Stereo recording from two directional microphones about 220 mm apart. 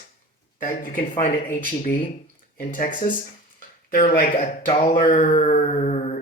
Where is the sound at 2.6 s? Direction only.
35° left (ahead or behind).